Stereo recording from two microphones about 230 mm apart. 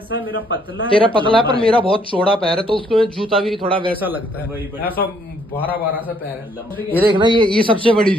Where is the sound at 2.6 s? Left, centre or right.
Right.